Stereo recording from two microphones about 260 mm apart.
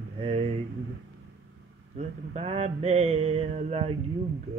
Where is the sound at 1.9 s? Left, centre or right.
Right.